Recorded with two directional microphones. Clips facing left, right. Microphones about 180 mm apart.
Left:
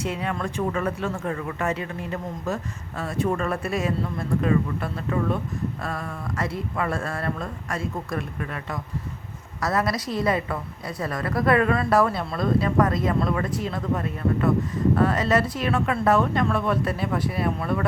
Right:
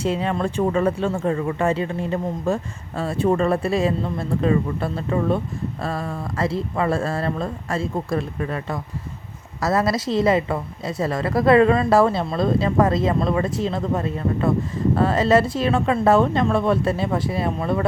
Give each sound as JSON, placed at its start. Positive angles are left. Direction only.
{"t": 0.0, "sound": "speech", "side_deg": -30}